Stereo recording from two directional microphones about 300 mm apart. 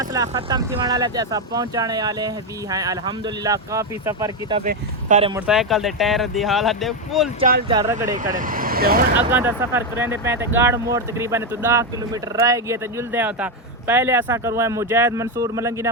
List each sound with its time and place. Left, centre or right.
0.0 s speech: centre
4.6 s speech: right
5.3 s speech: centre
7.7 s speech: centre
8.1 s speech: right
9.3 s speech: centre